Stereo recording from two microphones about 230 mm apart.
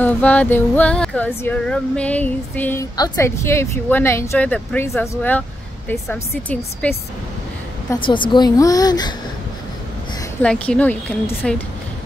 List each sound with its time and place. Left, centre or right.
0.0 s speech: centre
7.9 s speech: left
10.4 s speech: centre